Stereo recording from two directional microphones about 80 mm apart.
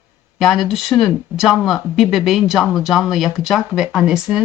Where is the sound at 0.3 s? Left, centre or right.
Centre.